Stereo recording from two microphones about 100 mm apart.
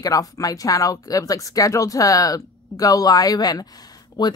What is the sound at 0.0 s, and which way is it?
Speech, 35° left (ahead or behind).